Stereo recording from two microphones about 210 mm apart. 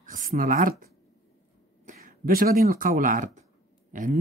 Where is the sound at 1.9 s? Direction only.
40° right (ahead or behind).